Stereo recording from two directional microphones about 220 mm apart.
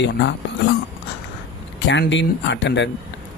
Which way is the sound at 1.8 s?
55° left (ahead or behind).